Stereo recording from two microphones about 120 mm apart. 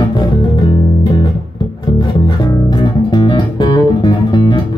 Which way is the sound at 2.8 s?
35° left (ahead or behind).